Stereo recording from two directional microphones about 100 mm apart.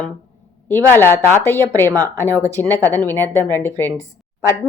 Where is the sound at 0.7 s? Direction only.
25° left (ahead or behind).